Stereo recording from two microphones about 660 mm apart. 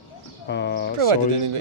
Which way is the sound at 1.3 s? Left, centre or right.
Right.